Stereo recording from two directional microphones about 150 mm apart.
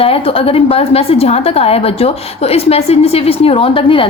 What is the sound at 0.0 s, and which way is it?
A woman's voice, 40° left (ahead or behind).